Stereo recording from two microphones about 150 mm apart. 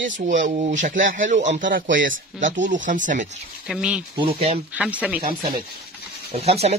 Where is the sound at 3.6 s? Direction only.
5° right (ahead or behind).